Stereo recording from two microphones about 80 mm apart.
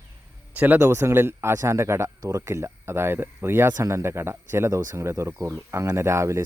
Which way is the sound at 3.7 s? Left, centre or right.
Right.